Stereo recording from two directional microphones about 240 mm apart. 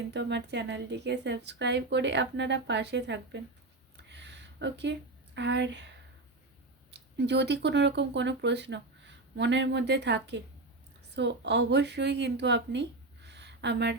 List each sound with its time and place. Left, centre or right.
0.1 s a woman's voice: right
3.9 s a sound: right
6.9 s a woman's voice: right